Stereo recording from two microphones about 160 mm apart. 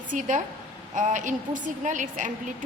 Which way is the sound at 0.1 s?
55° right (ahead or behind).